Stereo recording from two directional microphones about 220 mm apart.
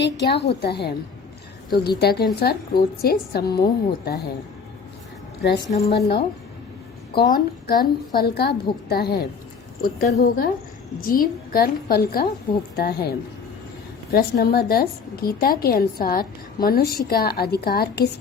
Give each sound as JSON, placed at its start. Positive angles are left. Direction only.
{"t": 0.0, "sound": "a woman's voice", "side_deg": 50}
{"t": 2.0, "sound": "a woman's voice", "side_deg": 45}
{"t": 5.4, "sound": "a woman's voice", "side_deg": 45}